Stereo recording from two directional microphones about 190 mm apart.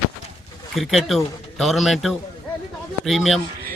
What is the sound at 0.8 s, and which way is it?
Speech, centre (ahead or behind).